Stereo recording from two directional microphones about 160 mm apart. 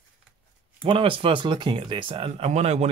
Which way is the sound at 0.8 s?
35° right (ahead or behind).